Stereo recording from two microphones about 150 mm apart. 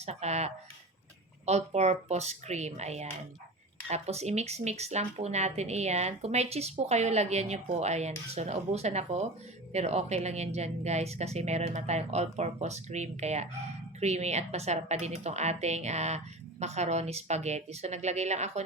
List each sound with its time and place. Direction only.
0.0 s speech: 45° right (ahead or behind)